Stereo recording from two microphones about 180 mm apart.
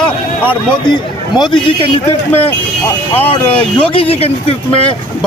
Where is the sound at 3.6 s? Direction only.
30° left (ahead or behind).